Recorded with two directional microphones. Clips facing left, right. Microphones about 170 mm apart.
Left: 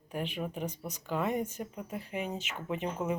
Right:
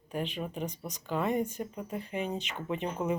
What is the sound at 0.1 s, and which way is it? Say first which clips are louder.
Speech: right 1 dB; 10° left (ahead or behind).